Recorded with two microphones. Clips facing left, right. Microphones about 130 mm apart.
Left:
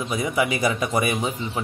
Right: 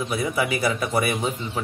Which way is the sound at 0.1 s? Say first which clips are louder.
Left 2 dB; 15° left (ahead or behind).